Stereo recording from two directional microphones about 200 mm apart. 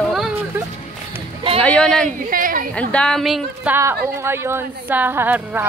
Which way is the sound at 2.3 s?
45° right (ahead or behind).